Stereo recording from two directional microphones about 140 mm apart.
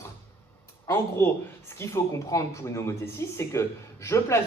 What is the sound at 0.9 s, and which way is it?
Speech, 20° left (ahead or behind).